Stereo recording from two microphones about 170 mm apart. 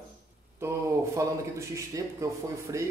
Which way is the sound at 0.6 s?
15° right (ahead or behind).